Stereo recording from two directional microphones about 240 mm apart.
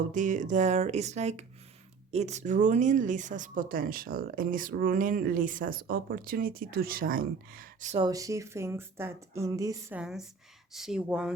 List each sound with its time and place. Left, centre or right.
0.1 s speech: right
8.0 s speech: centre
10.0 s speech: centre